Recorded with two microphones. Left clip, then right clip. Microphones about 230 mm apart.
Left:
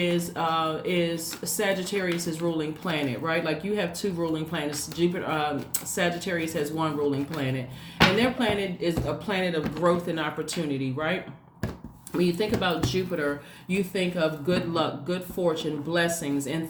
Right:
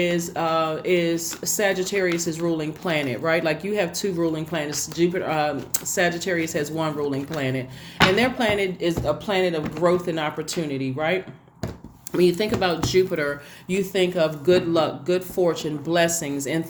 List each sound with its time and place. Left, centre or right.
0.3 s speech: right